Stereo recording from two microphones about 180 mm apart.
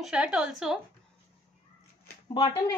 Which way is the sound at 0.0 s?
5° right (ahead or behind).